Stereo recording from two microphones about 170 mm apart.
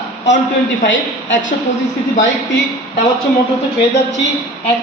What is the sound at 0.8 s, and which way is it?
Speech, 90° left.